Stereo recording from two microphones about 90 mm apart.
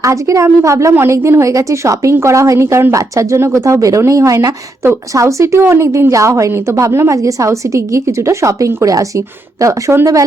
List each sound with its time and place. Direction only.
0.0 s a woman's voice: 35° right (ahead or behind)